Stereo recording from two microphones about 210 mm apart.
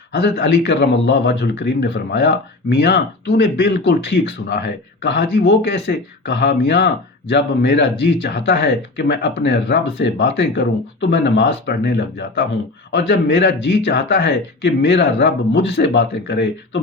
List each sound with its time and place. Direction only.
0.1 s speech: 55° left (ahead or behind)